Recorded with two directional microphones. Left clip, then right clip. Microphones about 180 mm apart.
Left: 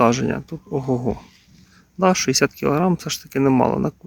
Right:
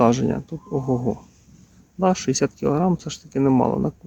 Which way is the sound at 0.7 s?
15° left (ahead or behind).